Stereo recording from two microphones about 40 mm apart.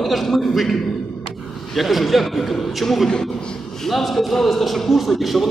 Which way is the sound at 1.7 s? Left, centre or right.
Centre.